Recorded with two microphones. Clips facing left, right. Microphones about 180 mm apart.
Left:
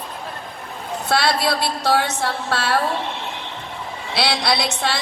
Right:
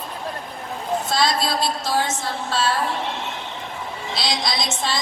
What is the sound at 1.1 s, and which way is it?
A woman's voice, 65° left (ahead or behind).